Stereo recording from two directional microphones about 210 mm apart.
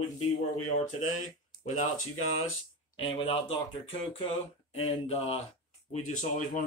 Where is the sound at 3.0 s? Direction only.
25° left (ahead or behind).